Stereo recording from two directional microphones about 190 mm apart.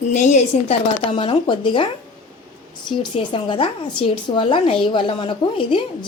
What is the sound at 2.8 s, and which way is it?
Speech, 25° left (ahead or behind).